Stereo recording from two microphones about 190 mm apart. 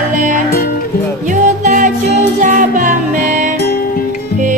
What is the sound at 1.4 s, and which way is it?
Music, 40° right (ahead or behind).